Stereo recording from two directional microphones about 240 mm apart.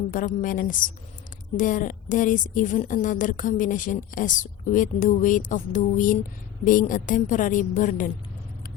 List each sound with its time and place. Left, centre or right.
0.1 s a woman's voice: left